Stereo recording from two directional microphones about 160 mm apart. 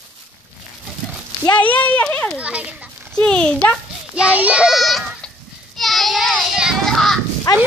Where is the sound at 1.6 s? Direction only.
10° left (ahead or behind).